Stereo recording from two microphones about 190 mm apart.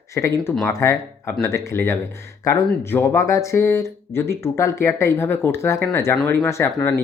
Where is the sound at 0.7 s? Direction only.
15° left (ahead or behind).